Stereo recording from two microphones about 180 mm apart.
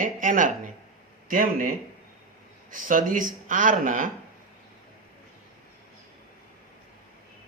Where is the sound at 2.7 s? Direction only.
50° right (ahead or behind).